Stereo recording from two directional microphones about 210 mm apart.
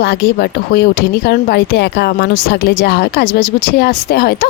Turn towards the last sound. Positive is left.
turn(degrees=45)  # may be behind; listen again after turning